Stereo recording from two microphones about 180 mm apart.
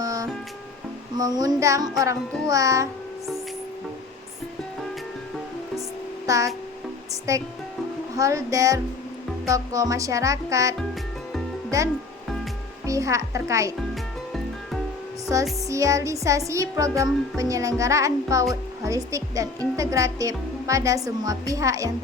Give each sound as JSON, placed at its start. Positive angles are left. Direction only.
{"t": 0.0, "sound": "music", "side_deg": -20}
{"t": 1.1, "sound": "speech", "side_deg": -20}
{"t": 6.2, "sound": "music", "side_deg": -20}
{"t": 7.3, "sound": "speech", "side_deg": -15}
{"t": 13.9, "sound": "music", "side_deg": 0}
{"t": 15.7, "sound": "speech", "side_deg": -15}